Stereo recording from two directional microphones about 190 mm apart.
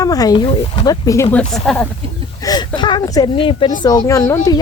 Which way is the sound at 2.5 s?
25° left (ahead or behind).